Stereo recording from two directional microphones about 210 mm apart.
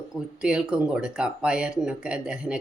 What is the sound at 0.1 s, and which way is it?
Speech, 5° right (ahead or behind).